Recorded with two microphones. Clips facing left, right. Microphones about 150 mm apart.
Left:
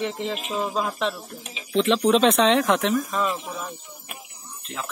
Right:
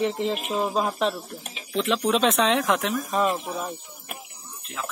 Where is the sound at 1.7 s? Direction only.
Centre (ahead or behind).